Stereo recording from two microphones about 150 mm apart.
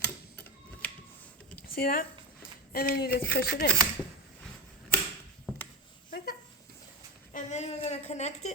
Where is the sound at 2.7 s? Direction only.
90° left.